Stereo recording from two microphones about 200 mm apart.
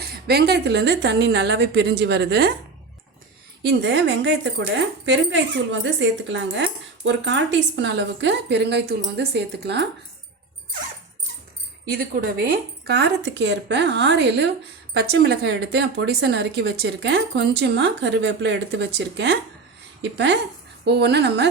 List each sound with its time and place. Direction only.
0.0 s speech: 55° right (ahead or behind)
3.7 s speech: 60° right (ahead or behind)
11.9 s speech: 50° right (ahead or behind)